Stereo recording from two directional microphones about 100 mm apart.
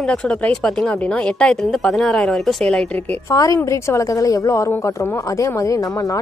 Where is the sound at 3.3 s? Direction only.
35° left (ahead or behind).